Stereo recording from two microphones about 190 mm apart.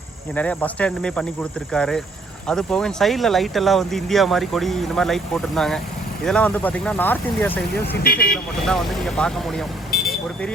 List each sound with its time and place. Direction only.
0.3 s speech: 5° left (ahead or behind)
8.0 s speech: 55° left (ahead or behind)
8.6 s speech: 5° left (ahead or behind)